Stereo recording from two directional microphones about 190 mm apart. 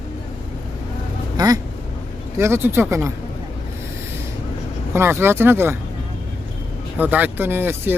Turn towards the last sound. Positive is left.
turn(degrees=-10)  # may be behind; listen again after turning